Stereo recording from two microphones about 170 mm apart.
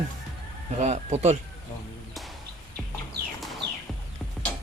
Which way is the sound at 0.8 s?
40° right (ahead or behind).